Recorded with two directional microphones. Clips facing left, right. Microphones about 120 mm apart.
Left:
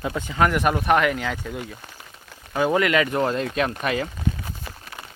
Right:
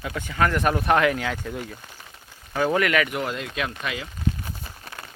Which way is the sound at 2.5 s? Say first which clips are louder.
Left 2 dB; 15° left (ahead or behind).